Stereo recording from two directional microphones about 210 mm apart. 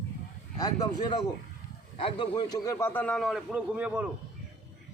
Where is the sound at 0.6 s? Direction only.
20° left (ahead or behind).